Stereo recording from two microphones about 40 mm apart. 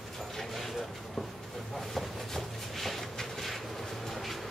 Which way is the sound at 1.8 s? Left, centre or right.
Centre.